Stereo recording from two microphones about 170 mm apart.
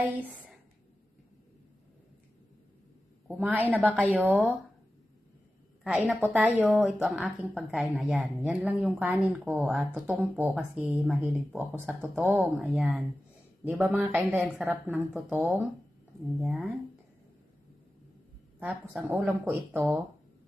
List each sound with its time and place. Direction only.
3.2 s speech: 10° right (ahead or behind)
5.8 s a woman's voice: 5° right (ahead or behind)
18.6 s speech: 10° right (ahead or behind)